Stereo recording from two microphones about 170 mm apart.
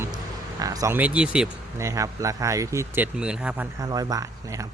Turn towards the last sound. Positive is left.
turn(degrees=-20)  # may be behind; listen again after turning